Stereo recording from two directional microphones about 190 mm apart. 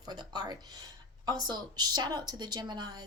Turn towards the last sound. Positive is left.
turn(degrees=-20)  # may be behind; listen again after turning